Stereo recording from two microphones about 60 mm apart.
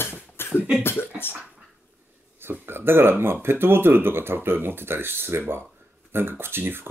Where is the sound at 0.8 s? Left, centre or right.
Left.